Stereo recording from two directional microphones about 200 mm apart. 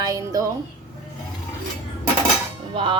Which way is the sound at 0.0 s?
20° right (ahead or behind).